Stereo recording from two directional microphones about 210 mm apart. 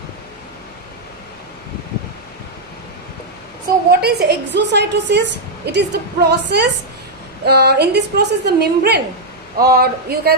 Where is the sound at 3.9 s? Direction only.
50° right (ahead or behind).